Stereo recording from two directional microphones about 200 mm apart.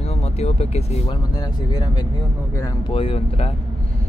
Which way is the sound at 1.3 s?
20° left (ahead or behind).